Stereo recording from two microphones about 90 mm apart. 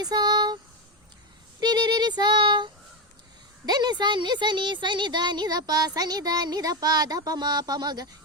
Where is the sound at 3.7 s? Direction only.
50° right (ahead or behind).